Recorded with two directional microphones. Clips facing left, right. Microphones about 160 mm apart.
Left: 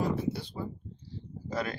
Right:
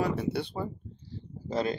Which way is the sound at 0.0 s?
70° right (ahead or behind).